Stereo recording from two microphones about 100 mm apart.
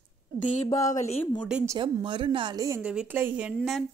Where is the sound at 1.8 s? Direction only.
55° right (ahead or behind).